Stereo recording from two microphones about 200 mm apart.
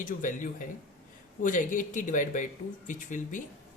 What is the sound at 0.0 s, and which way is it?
Speech, 40° left (ahead or behind).